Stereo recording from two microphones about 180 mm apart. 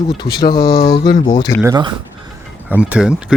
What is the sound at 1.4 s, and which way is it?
Speech, 20° left (ahead or behind).